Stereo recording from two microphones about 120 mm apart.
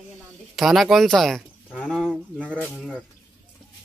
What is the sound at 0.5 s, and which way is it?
Speech, centre (ahead or behind).